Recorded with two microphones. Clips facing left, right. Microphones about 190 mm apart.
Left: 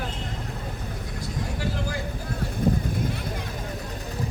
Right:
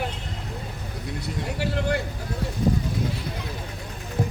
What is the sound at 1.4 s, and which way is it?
Vehicle, 65° right (ahead or behind).